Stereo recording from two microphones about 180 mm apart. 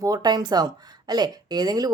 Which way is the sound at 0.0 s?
20° right (ahead or behind).